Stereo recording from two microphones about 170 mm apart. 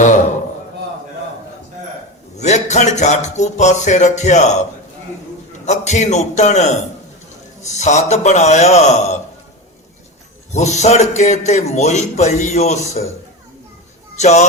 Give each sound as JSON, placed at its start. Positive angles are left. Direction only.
{"t": 2.4, "sound": "speech", "side_deg": 40}
{"t": 5.6, "sound": "a man's voice", "side_deg": 45}
{"t": 10.5, "sound": "a man's voice", "side_deg": 40}
{"t": 14.2, "sound": "speech", "side_deg": 40}